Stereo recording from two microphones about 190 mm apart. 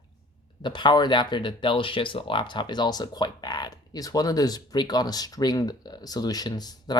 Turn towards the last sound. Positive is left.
turn(degrees=20)  # may be behind; listen again after turning